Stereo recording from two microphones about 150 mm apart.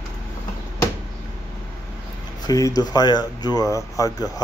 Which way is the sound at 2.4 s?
25° left (ahead or behind).